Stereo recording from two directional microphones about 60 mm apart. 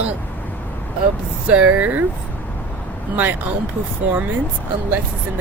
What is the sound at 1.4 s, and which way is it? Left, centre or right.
Speech, right.